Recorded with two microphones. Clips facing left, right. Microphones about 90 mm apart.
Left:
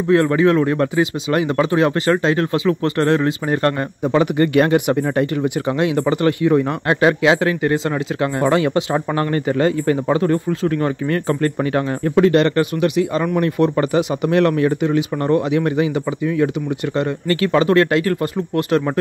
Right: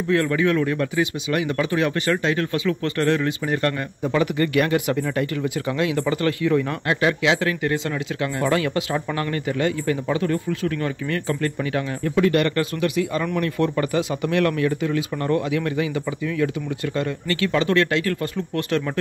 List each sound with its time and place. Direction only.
0.1 s speech: 30° left (ahead or behind)
12.3 s speech: 25° left (ahead or behind)